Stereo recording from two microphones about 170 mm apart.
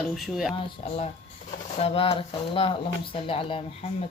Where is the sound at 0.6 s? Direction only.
35° left (ahead or behind).